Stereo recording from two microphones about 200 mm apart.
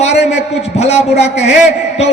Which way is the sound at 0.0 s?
35° left (ahead or behind).